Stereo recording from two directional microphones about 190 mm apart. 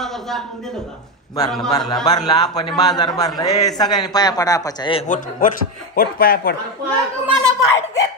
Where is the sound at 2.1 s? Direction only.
20° left (ahead or behind).